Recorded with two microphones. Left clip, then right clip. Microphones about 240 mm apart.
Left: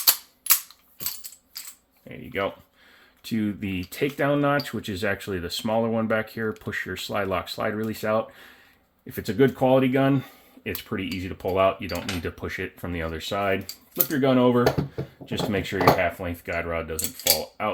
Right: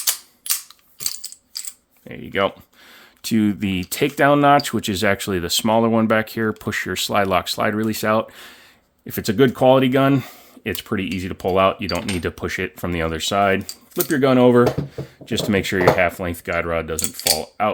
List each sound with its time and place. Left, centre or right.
2.0 s speech: right